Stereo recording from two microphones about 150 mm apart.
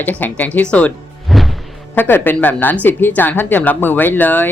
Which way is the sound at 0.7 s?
5° left (ahead or behind).